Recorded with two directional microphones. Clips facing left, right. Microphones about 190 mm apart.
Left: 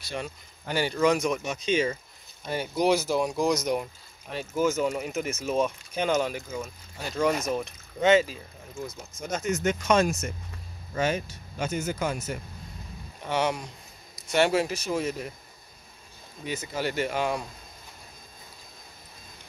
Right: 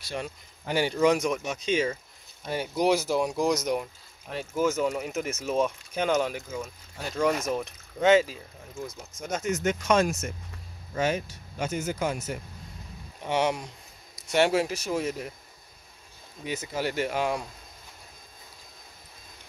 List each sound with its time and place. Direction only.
0.7 s speech: 15° right (ahead or behind); by 7.3 s 5° left (ahead or behind)
8.0 s speech: 5° right (ahead or behind)
16.4 s speech: 10° right (ahead or behind)